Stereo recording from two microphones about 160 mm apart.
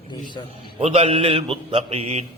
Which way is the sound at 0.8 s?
40° right (ahead or behind).